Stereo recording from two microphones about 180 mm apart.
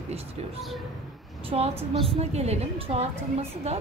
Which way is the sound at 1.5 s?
35° right (ahead or behind).